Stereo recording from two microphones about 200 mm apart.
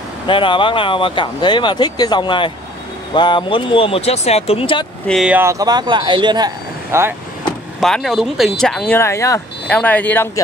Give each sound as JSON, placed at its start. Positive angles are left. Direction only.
{"t": 0.3, "sound": "speech", "side_deg": 25}
{"t": 5.0, "sound": "speech", "side_deg": 0}
{"t": 7.8, "sound": "speech", "side_deg": 0}